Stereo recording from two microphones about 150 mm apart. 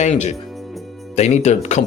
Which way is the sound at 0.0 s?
50° left (ahead or behind).